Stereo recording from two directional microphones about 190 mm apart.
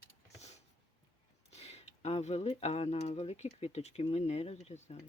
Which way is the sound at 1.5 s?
35° left (ahead or behind).